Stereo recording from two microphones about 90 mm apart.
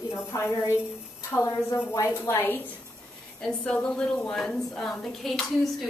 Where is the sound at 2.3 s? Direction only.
25° left (ahead or behind).